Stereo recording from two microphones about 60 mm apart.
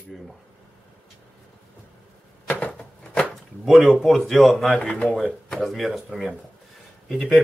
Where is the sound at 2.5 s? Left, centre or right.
Left.